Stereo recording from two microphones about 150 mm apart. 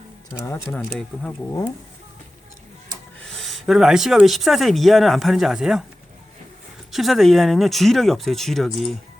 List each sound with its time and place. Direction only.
0.3 s speech: 15° left (ahead or behind)
0.8 s speech: 5° right (ahead or behind)
3.2 s speech: 5° left (ahead or behind)
6.9 s speech: centre (ahead or behind)